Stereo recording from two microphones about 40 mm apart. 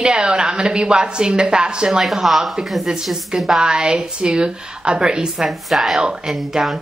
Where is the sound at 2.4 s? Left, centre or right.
Centre.